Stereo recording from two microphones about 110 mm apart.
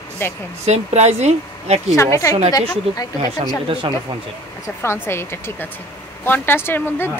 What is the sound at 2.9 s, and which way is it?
Speech, 65° right (ahead or behind).